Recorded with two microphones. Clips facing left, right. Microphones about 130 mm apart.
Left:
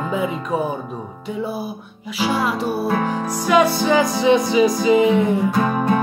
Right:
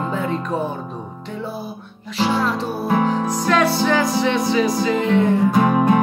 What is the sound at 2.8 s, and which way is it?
Music, 20° right (ahead or behind).